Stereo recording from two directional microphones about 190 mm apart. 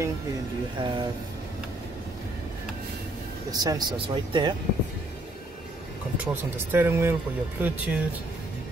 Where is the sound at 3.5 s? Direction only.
20° right (ahead or behind).